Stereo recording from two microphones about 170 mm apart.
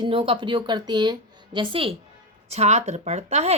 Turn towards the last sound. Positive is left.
turn(degrees=-40)  # may be behind; listen again after turning